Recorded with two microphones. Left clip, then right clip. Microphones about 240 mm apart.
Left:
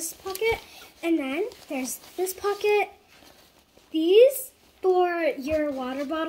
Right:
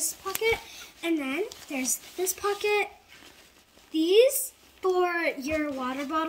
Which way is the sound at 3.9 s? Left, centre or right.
Centre.